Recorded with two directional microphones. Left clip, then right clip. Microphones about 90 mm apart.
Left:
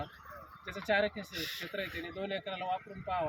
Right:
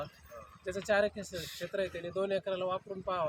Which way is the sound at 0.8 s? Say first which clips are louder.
Right 1 dB; 35° right (ahead or behind).